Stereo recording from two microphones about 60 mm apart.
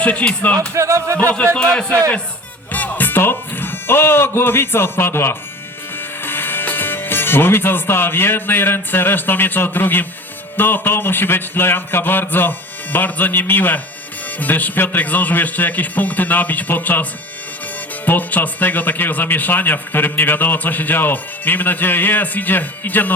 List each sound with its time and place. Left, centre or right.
0.0 s speech: left
0.7 s speech: right
1.5 s a man's voice: centre
2.7 s speech: left